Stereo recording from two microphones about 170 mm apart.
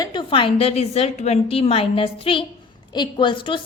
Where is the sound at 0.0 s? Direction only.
25° left (ahead or behind).